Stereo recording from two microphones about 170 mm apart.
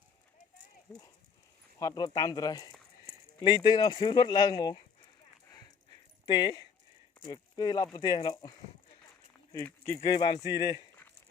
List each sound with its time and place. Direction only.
0.9 s speech: 5° left (ahead or behind)
1.8 s speech: 25° left (ahead or behind)
6.2 s speech: 25° left (ahead or behind)
9.6 s speech: 10° left (ahead or behind)
10.0 s speech: 25° left (ahead or behind)